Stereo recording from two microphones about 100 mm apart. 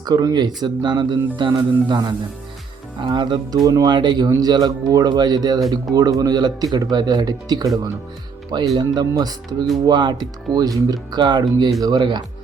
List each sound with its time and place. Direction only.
0.0 s speech: 40° right (ahead or behind)
3.1 s speech: 50° right (ahead or behind)
3.5 s speech: 35° right (ahead or behind)
8.7 s speech: 40° right (ahead or behind)